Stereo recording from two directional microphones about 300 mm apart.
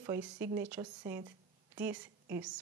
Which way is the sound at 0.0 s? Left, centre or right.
Centre.